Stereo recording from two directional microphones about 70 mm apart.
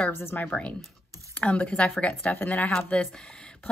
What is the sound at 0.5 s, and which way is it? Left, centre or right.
Speech, centre.